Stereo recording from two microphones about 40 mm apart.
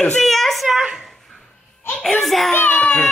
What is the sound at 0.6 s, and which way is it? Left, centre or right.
Speech, centre.